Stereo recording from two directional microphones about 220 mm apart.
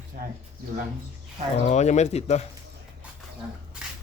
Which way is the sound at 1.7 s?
30° left (ahead or behind).